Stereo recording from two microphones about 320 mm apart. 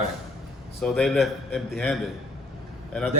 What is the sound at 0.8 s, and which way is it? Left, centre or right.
A man's voice, centre.